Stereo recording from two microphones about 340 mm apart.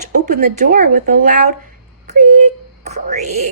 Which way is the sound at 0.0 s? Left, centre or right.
Right.